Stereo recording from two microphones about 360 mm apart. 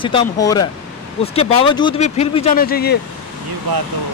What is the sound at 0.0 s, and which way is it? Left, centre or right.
Speech, centre.